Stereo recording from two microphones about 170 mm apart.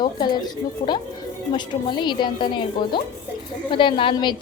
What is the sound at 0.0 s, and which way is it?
A woman's voice, 25° left (ahead or behind).